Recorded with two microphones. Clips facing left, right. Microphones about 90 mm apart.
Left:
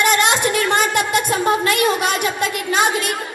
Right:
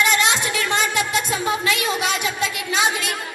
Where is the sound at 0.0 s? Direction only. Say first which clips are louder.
Left 3 dB; 50° left (ahead or behind).